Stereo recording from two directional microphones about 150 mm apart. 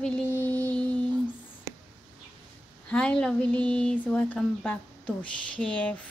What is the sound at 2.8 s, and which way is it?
Speech, 5° left (ahead or behind).